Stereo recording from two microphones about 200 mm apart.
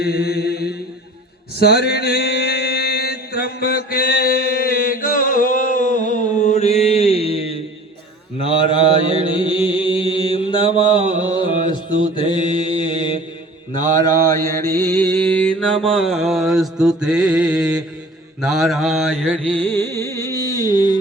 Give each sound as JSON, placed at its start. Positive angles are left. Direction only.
{"t": 0.0, "sound": "mantra", "side_deg": 50}
{"t": 14.3, "sound": "mantra", "side_deg": 15}
{"t": 19.5, "sound": "music", "side_deg": 10}